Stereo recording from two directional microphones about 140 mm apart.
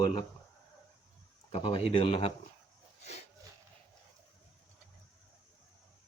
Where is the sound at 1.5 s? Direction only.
40° left (ahead or behind).